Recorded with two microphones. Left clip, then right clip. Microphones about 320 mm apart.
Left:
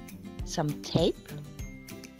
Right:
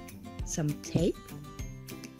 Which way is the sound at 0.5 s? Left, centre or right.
Centre.